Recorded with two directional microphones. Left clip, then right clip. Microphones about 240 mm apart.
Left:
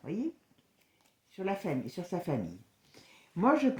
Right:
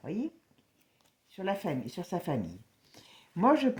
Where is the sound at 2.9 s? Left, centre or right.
Right.